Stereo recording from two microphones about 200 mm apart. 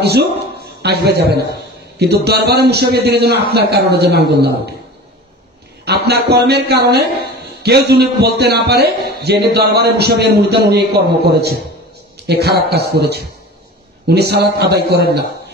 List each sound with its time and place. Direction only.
0.0 s a man's voice: 55° right (ahead or behind)
5.9 s a man's voice: 55° right (ahead or behind)